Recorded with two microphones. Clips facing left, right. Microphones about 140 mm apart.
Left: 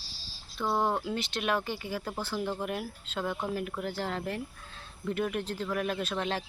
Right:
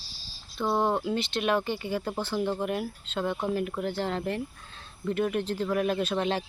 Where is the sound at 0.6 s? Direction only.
20° right (ahead or behind).